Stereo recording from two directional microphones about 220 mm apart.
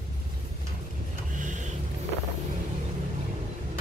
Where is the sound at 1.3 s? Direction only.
35° right (ahead or behind).